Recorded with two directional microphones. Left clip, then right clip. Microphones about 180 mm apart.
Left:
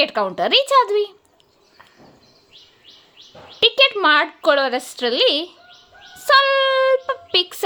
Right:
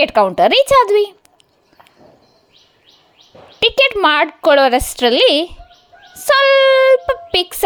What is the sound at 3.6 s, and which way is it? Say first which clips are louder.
Speech: right 2 dB; 35° right (ahead or behind).